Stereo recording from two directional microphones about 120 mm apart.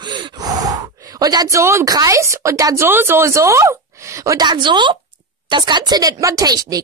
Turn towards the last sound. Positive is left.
turn(degrees=-30)  # may be behind; listen again after turning